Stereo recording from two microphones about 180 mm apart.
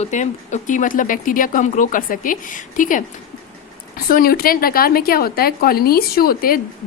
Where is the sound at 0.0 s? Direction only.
40° left (ahead or behind).